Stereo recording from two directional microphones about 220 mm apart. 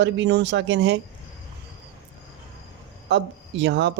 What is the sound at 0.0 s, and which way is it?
Speech, 50° right (ahead or behind).